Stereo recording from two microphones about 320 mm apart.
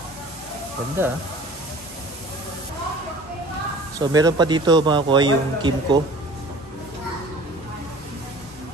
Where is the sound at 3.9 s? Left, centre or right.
Centre.